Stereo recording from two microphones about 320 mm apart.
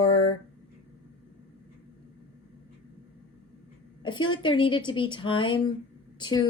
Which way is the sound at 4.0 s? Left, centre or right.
Centre.